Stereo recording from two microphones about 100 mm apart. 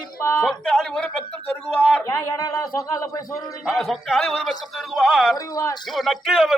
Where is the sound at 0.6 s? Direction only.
5° left (ahead or behind).